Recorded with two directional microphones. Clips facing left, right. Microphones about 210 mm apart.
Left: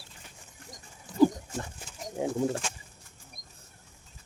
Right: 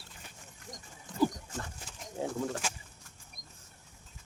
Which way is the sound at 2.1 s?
20° left (ahead or behind).